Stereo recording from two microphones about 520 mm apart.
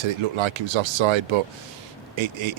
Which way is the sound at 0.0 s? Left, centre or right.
Right.